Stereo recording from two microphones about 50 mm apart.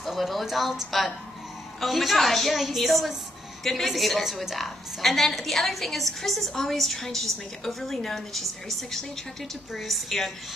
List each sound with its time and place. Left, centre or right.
0.0 s a woman's voice: centre